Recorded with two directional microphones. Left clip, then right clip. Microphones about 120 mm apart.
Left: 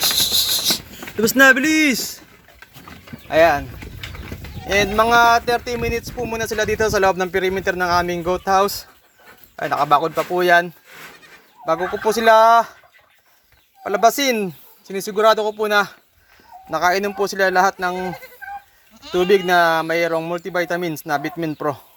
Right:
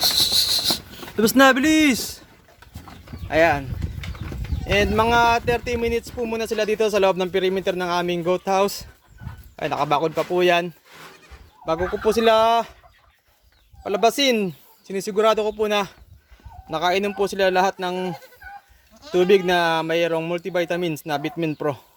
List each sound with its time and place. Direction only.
0.0 s a sound: 40° right (ahead or behind)
3.2 s speech: 30° right (ahead or behind)
4.7 s a man's voice: 30° right (ahead or behind)
11.7 s speech: 40° right (ahead or behind)
13.8 s speech: 35° right (ahead or behind)
19.1 s speech: 35° right (ahead or behind)